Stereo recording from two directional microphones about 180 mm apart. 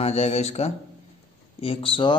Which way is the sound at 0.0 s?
35° left (ahead or behind).